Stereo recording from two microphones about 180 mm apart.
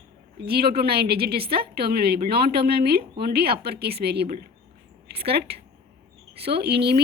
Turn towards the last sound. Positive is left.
turn(degrees=-65)  # may be behind; listen again after turning